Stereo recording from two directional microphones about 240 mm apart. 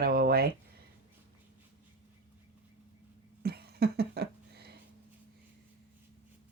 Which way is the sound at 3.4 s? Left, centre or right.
Right.